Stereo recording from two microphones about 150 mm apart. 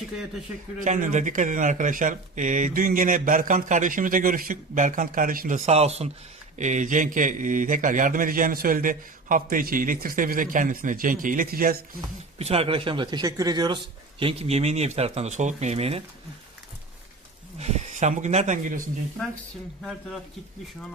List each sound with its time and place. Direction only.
0.9 s speech: 55° right (ahead or behind); by 11.8 s 75° right (ahead or behind)
12.4 s speech: 40° right (ahead or behind)
14.2 s speech: 40° right (ahead or behind)
17.6 s speech: 50° right (ahead or behind)